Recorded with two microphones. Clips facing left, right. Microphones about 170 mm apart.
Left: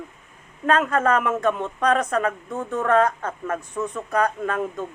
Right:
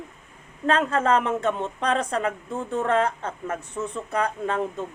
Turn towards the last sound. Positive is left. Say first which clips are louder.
# left 1 dB
turn(degrees=-25)  # may be behind; listen again after turning